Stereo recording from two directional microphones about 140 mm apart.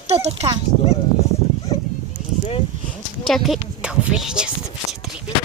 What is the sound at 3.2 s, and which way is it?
Speech, centre (ahead or behind).